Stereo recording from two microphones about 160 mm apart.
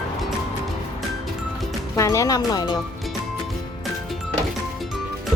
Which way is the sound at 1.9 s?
20° left (ahead or behind).